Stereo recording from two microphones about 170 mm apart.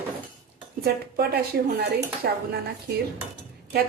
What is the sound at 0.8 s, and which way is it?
Speech, 65° right (ahead or behind).